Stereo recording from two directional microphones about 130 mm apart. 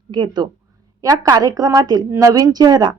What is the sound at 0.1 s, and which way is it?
A woman's voice, 35° right (ahead or behind).